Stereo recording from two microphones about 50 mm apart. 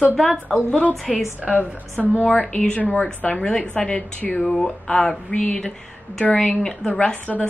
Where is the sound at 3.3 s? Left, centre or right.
Centre.